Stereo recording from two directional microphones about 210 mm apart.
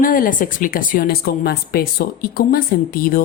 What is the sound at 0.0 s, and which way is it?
A woman's voice, 40° left (ahead or behind).